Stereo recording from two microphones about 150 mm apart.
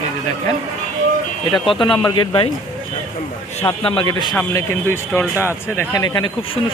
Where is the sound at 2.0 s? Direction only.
30° left (ahead or behind).